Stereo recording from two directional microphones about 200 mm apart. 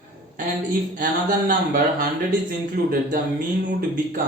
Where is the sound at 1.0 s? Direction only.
45° right (ahead or behind).